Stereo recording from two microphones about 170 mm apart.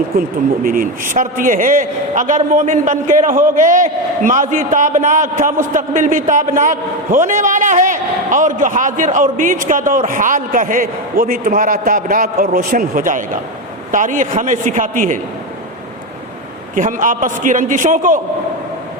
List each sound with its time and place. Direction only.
0.2 s a man's voice: 55° right (ahead or behind)
16.7 s a man's voice: 50° right (ahead or behind)